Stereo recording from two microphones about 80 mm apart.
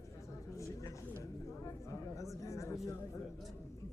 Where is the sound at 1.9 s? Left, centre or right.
Left.